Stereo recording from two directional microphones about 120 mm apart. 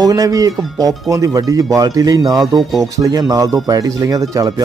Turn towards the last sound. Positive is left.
turn(degrees=-30)  # may be behind; listen again after turning